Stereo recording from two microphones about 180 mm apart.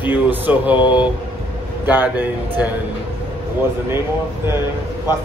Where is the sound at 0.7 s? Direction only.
25° left (ahead or behind).